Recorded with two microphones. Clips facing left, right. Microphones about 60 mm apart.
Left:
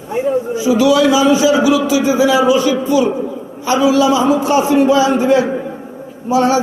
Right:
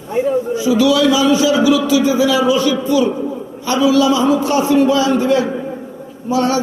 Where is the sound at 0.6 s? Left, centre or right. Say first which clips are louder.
Left 2 dB; left.